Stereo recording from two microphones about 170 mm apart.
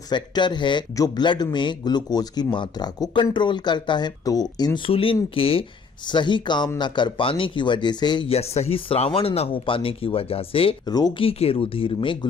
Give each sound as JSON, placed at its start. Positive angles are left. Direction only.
{"t": 0.1, "sound": "speech", "side_deg": 25}